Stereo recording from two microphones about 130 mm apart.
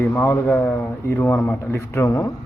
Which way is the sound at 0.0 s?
15° left (ahead or behind).